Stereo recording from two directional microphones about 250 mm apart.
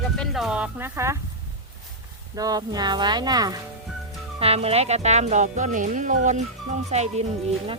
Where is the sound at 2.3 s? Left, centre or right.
Centre.